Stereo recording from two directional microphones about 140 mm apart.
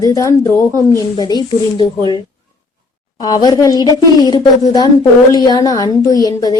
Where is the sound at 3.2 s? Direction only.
30° left (ahead or behind).